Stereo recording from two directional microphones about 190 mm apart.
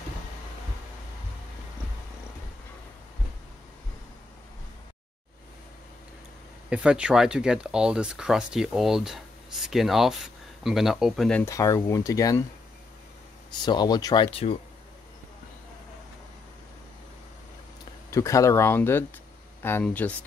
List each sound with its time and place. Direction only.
6.7 s speech: 5° right (ahead or behind); by 12.4 s 15° left (ahead or behind)
13.7 s speech: 20° left (ahead or behind)
18.1 s speech: 15° left (ahead or behind)